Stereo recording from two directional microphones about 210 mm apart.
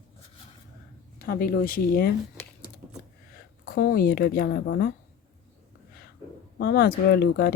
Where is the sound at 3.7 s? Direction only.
45° left (ahead or behind).